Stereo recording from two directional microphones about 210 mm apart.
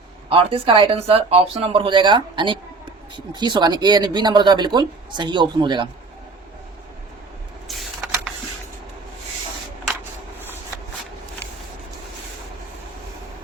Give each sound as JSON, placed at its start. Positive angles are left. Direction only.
{"t": 0.3, "sound": "speech", "side_deg": -25}